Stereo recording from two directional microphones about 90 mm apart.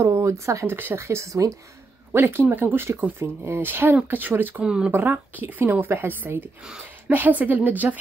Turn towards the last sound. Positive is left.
turn(degrees=-20)  # may be behind; listen again after turning